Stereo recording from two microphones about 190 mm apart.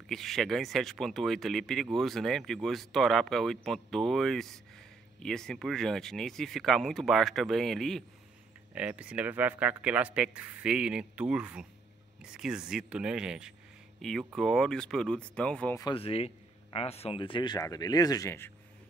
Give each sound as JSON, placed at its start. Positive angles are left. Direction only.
{"t": 0.1, "sound": "speech", "side_deg": 0}
{"t": 15.8, "sound": "speech", "side_deg": 30}